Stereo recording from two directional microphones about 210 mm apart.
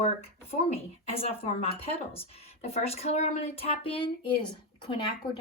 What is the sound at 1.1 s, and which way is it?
Speech, 30° left (ahead or behind).